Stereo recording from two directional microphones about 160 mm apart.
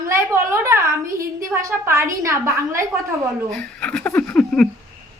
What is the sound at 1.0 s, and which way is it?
Speech, 60° right (ahead or behind).